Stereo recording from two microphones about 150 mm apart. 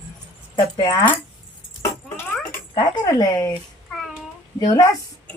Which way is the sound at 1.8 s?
15° left (ahead or behind).